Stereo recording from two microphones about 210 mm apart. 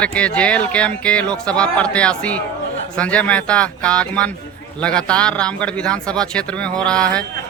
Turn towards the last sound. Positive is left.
turn(degrees=5)  # may be behind; listen again after turning